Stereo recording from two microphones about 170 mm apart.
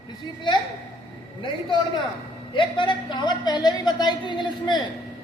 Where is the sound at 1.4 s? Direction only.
30° left (ahead or behind).